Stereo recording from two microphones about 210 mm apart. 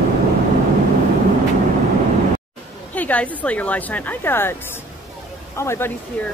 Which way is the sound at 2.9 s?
5° left (ahead or behind).